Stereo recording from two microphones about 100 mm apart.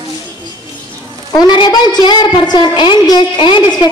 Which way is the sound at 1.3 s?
45° left (ahead or behind).